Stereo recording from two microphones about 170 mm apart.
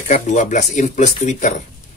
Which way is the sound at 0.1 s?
45° left (ahead or behind).